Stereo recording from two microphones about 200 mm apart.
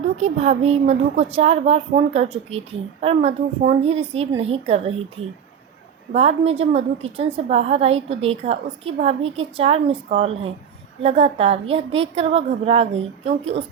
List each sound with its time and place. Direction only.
0.2 s a woman's voice: 35° right (ahead or behind)
6.1 s a woman's voice: 30° right (ahead or behind)